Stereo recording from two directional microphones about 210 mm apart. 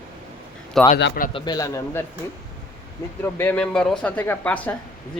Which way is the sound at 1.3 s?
20° left (ahead or behind).